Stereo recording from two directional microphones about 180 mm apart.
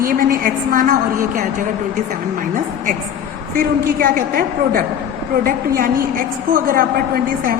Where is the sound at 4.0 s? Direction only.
55° right (ahead or behind).